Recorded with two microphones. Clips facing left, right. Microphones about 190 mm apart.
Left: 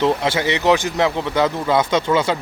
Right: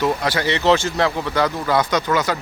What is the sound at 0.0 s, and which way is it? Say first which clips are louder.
Speech: left 2 dB; 25° left (ahead or behind).